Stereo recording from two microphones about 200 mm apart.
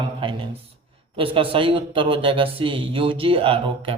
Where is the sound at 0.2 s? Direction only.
25° right (ahead or behind).